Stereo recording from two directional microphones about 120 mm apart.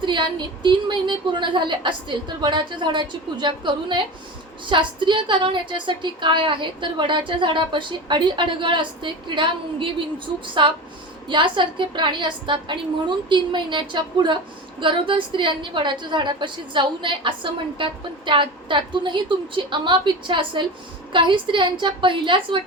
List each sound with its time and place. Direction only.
0.0 s a woman's voice: 40° right (ahead or behind)